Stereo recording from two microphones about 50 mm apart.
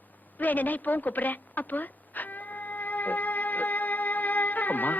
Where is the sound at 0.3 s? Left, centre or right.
Left.